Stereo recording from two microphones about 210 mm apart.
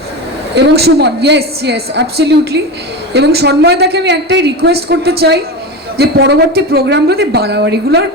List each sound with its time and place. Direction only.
0.5 s a woman's voice: 50° right (ahead or behind)